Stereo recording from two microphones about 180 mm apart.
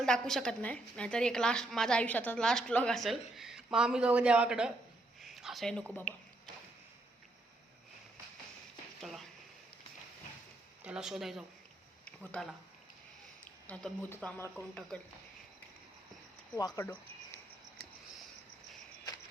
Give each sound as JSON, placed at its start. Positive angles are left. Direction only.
{"t": 0.0, "sound": "a woman's voice", "side_deg": 5}
{"t": 9.0, "sound": "a sound", "side_deg": 0}
{"t": 10.8, "sound": "a woman's voice", "side_deg": -5}
{"t": 12.0, "sound": "a sound", "side_deg": 5}
{"t": 13.4, "sound": "a woman's voice", "side_deg": 5}
{"t": 16.6, "sound": "speech", "side_deg": 20}